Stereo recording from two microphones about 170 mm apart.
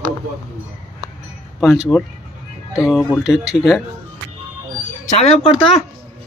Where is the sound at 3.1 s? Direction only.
5° right (ahead or behind).